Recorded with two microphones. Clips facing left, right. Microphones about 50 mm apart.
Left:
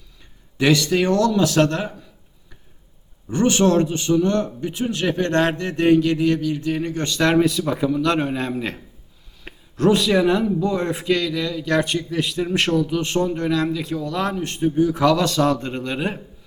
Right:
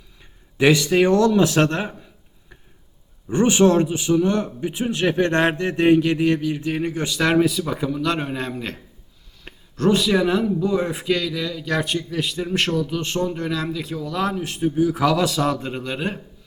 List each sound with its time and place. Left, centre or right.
0.5 s speech: centre
3.2 s a man's voice: centre